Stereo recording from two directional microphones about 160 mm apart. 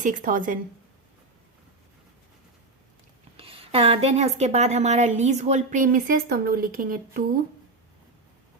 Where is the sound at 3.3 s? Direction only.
35° right (ahead or behind); by 7.2 s 60° right (ahead or behind).